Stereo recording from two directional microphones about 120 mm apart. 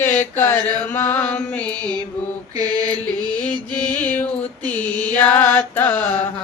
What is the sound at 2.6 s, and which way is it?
Mantra, 35° right (ahead or behind).